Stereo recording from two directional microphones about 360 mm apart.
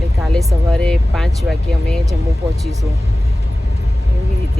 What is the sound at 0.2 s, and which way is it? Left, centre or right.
Speech, centre.